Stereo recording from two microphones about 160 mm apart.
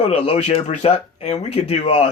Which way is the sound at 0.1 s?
40° left (ahead or behind).